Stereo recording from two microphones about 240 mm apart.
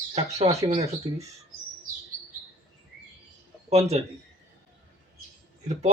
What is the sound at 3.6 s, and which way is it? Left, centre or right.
Speech, right.